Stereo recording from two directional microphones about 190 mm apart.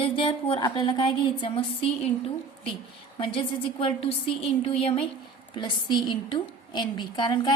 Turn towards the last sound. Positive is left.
turn(degrees=25)  # may be behind; listen again after turning